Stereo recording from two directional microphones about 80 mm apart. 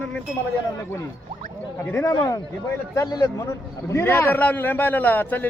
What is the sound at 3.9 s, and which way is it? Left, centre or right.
A man's voice, left.